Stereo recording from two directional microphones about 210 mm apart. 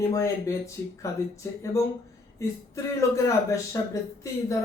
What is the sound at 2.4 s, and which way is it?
Speech, 15° left (ahead or behind).